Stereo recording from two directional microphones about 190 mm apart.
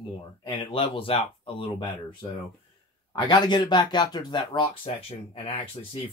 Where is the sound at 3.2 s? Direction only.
25° left (ahead or behind).